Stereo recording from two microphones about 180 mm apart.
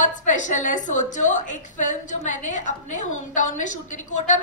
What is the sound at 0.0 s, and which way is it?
A woman's voice, 45° left (ahead or behind).